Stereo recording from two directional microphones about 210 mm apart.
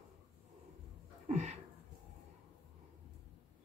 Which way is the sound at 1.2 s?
30° right (ahead or behind).